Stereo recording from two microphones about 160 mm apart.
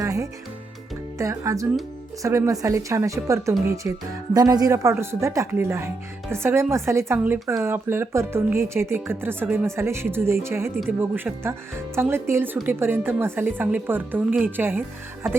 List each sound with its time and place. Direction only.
0.0 s music: 20° right (ahead or behind)
1.2 s speech: 20° right (ahead or behind)
4.4 s speech: 25° right (ahead or behind)